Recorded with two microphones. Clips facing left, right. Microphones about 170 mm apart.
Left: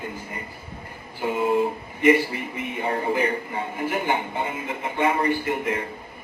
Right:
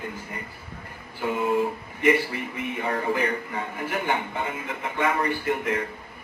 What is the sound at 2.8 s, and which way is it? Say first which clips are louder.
Speech: left 2 dB; 30° left (ahead or behind).